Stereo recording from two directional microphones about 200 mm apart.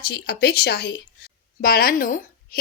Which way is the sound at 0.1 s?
50° left (ahead or behind).